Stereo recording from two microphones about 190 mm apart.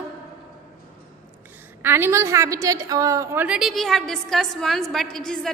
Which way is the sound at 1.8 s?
10° right (ahead or behind).